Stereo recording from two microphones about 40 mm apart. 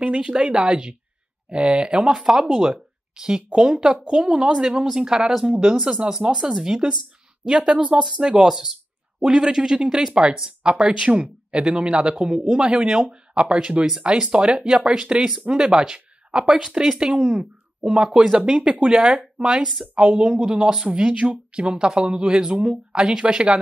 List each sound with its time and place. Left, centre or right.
0.0 s a man's voice: right
6.3 s a man's voice: centre
7.7 s speech: right
8.0 s a man's voice: centre
15.6 s a man's voice: centre
20.0 s a man's voice: right
23.2 s a man's voice: right